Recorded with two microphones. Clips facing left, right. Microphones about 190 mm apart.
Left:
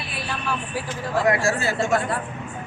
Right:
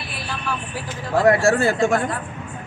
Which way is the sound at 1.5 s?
55° right (ahead or behind).